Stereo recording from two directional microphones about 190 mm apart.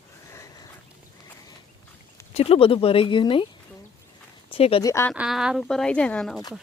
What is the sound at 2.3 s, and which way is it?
Speech, 30° left (ahead or behind).